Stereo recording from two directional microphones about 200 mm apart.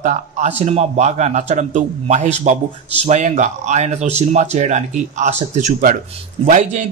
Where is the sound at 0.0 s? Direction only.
35° right (ahead or behind).